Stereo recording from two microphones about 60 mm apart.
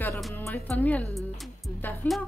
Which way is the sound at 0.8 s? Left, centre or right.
Left.